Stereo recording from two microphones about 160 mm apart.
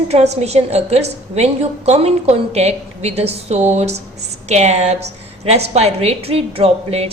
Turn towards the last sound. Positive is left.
turn(degrees=-35)  # may be behind; listen again after turning